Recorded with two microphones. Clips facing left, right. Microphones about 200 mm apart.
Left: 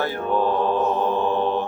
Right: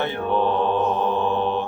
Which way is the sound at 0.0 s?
5° left (ahead or behind).